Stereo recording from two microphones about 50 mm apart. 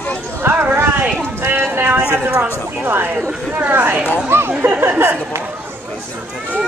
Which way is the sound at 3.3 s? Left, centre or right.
Right.